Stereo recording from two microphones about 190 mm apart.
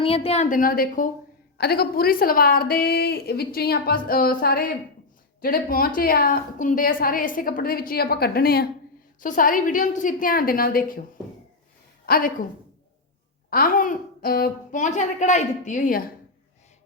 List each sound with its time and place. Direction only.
0.0 s a woman's voice: 30° left (ahead or behind); by 11.0 s 50° left (ahead or behind)
12.0 s a woman's voice: 50° left (ahead or behind)
13.5 s a woman's voice: 45° left (ahead or behind)